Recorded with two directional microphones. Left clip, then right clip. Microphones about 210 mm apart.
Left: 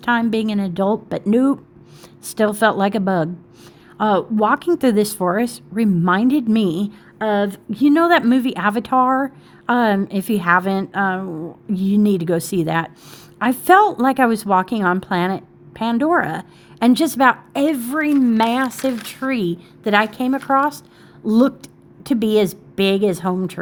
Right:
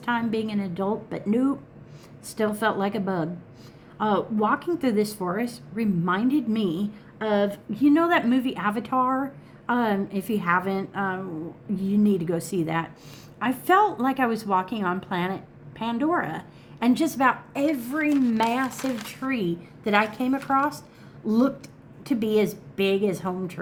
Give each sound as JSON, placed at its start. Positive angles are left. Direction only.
{"t": 0.0, "sound": "a woman's voice", "side_deg": 45}